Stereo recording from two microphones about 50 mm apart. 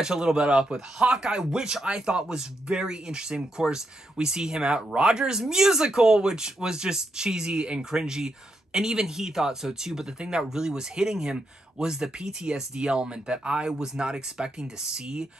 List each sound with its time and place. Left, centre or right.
0.0 s speech: centre